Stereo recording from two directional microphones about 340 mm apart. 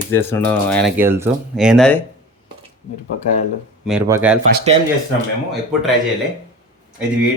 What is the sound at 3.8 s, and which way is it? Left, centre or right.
Speech, centre.